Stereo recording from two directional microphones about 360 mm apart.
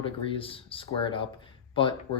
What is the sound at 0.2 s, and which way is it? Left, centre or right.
Speech, centre.